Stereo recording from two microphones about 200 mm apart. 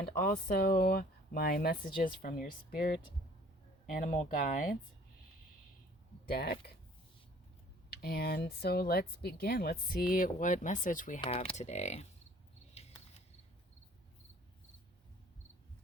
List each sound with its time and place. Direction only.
0.2 s speech: 50° left (ahead or behind)
3.9 s speech: 40° left (ahead or behind)
6.2 s speech: 50° left (ahead or behind)
7.9 s speech: 50° left (ahead or behind)
11.2 s speech: 30° left (ahead or behind)
12.7 s a sound: 30° left (ahead or behind)